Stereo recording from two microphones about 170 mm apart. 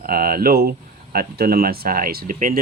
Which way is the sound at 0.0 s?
60° right (ahead or behind).